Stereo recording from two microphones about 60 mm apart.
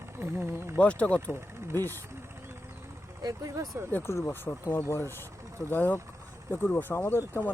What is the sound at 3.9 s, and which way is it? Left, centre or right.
Speech, left.